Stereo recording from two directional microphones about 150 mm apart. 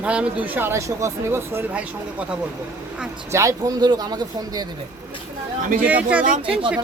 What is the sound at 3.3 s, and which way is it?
Speech, 20° right (ahead or behind).